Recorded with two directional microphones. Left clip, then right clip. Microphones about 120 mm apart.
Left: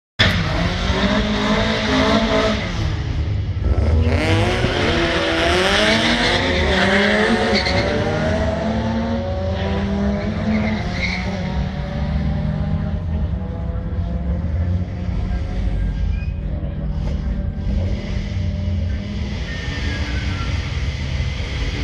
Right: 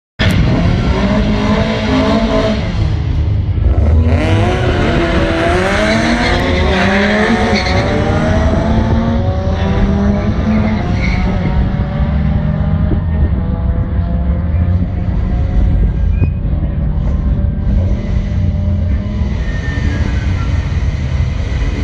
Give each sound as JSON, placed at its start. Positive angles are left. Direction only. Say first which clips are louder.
{"t": 0.2, "sound": "vehicle", "louder": "right 2 dB", "side_deg": -10}
{"t": 4.0, "sound": "vehicle", "louder": "right 3 dB", "side_deg": 40}
{"t": 5.0, "sound": "vehicle", "louder": "right 4 dB", "side_deg": 20}